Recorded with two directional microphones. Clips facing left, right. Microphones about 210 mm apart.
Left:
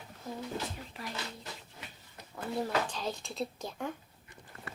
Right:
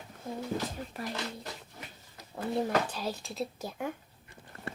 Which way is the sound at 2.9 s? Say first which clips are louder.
Right 1 dB; 5° right (ahead or behind).